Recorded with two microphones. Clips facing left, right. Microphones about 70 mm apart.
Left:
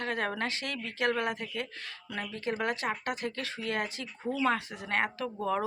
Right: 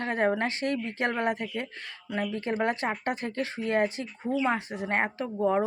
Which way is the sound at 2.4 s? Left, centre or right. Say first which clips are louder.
Right 1 dB; right.